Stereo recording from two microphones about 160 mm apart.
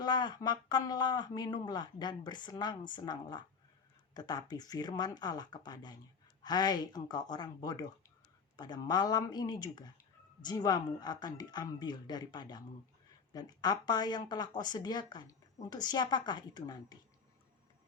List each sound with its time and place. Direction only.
0.0 s speech: 25° left (ahead or behind)